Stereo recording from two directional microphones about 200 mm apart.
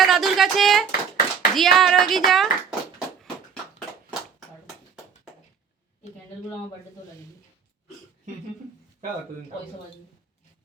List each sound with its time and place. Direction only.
0.0 s clapping: centre (ahead or behind)
0.9 s hands: 50° left (ahead or behind)
1.5 s clapping: centre (ahead or behind)